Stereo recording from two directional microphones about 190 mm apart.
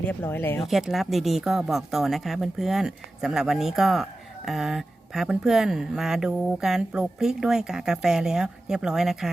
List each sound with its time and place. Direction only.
0.0 s speech: 10° left (ahead or behind)
0.6 s speech: centre (ahead or behind)